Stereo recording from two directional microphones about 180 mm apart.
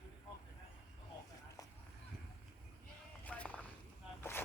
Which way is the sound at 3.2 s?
10° left (ahead or behind).